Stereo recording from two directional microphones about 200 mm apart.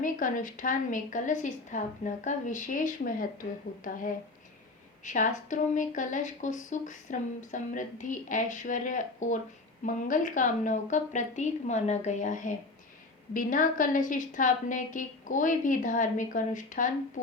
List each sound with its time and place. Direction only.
0.0 s speech: 40° left (ahead or behind)
5.0 s speech: 40° left (ahead or behind)